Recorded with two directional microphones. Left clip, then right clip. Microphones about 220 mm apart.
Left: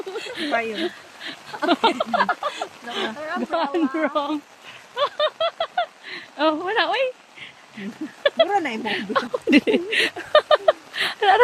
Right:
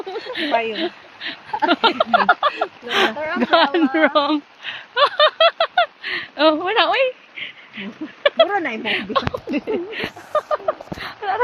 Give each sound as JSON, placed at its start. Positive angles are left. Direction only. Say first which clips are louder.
{"t": 0.1, "sound": "speech", "louder": "right 4 dB", "side_deg": 0}
{"t": 2.1, "sound": "speech", "louder": "right 6 dB", "side_deg": -20}
{"t": 3.4, "sound": "speech", "louder": "right 10 dB", "side_deg": -15}
{"t": 3.7, "sound": "a sound", "louder": "right 6 dB", "side_deg": -5}
{"t": 8.2, "sound": "speech", "louder": "right 3 dB", "side_deg": 15}
{"t": 9.5, "sound": "a sound", "louder": "left 5 dB", "side_deg": 45}